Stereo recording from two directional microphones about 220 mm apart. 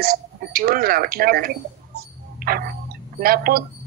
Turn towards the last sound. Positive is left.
turn(degrees=-40)  # may be behind; listen again after turning